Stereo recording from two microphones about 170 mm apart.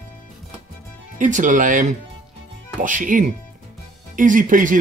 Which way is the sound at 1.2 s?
50° right (ahead or behind).